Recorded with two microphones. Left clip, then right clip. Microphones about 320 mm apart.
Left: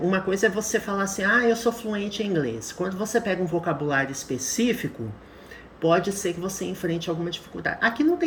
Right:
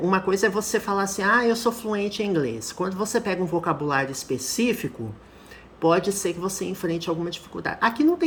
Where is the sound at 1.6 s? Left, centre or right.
Centre.